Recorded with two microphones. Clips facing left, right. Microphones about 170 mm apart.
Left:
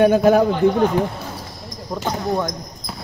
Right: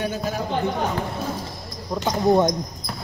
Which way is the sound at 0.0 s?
60° left (ahead or behind).